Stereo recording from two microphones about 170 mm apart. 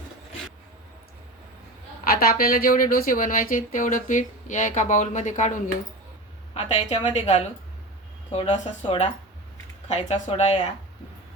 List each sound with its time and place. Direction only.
2.0 s speech: 60° left (ahead or behind)
6.5 s a woman's voice: 35° left (ahead or behind)